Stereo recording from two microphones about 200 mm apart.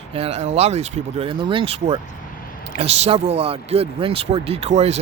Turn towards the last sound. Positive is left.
turn(degrees=-35)  # may be behind; listen again after turning